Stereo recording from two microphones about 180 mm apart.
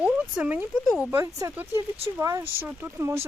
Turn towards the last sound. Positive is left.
turn(degrees=-10)  # may be behind; listen again after turning